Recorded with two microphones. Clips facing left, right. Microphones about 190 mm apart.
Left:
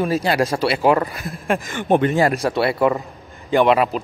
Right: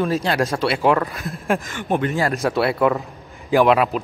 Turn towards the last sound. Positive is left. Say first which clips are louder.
# even
turn(degrees=0)  # may be behind; listen again after turning